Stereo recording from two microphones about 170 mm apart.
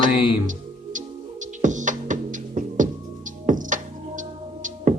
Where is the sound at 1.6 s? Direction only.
45° right (ahead or behind).